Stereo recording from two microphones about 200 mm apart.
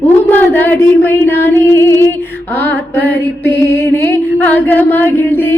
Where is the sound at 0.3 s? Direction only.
10° left (ahead or behind).